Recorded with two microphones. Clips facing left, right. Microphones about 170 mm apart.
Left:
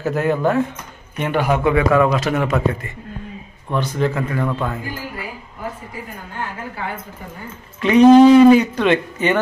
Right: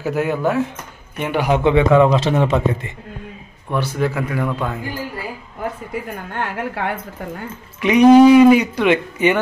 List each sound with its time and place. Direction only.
0.0 s speech: 10° right (ahead or behind)
1.6 s a man's voice: 25° right (ahead or behind)
3.7 s speech: 10° right (ahead or behind)
6.3 s a woman's voice: 70° right (ahead or behind)
7.8 s speech: 15° right (ahead or behind)